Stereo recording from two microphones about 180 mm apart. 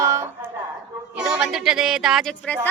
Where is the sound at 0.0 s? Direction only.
15° right (ahead or behind).